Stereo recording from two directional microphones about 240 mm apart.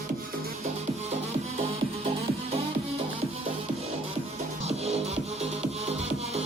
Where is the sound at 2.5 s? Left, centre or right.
Right.